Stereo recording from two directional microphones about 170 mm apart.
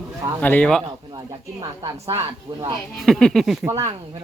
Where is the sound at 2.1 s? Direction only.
25° right (ahead or behind).